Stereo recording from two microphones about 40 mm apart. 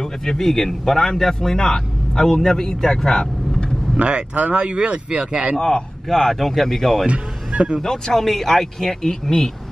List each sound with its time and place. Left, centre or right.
0.0 s a man's voice: centre
4.0 s speech: right
5.6 s a man's voice: centre
7.1 s speech: right
7.8 s a man's voice: centre